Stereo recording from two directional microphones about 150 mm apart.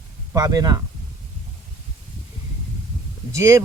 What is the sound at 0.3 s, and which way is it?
Speech, 25° right (ahead or behind).